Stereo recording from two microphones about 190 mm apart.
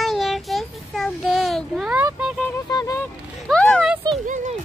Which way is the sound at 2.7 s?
20° left (ahead or behind).